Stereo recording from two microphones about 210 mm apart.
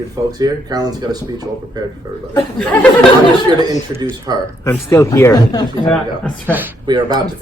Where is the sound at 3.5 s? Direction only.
20° right (ahead or behind).